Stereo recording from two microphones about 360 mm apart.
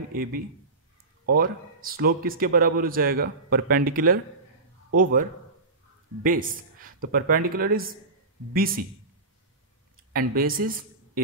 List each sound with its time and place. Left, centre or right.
0.1 s speech: right
6.2 s speech: right
10.1 s speech: right